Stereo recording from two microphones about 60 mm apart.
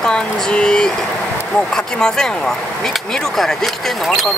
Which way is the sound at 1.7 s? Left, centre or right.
Centre.